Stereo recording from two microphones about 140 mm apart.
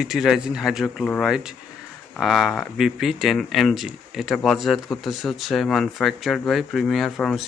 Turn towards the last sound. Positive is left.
turn(degrees=5)  # may be behind; listen again after turning